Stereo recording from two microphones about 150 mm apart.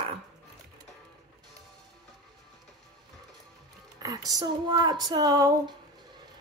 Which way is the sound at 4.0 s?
25° right (ahead or behind).